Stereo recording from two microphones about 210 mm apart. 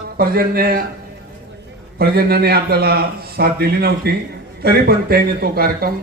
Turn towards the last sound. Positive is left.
turn(degrees=-45)  # may be behind; listen again after turning